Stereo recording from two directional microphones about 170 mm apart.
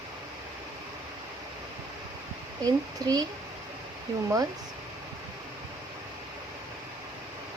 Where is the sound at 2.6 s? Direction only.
20° right (ahead or behind).